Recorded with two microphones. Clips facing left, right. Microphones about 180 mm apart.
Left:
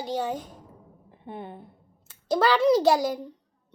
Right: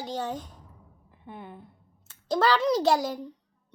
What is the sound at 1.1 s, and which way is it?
Speech, 30° left (ahead or behind).